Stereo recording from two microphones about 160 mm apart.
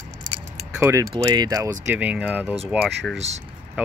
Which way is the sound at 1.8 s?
5° right (ahead or behind).